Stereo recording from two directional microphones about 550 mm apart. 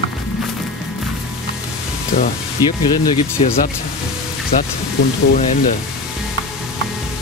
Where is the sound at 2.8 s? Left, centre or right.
Centre.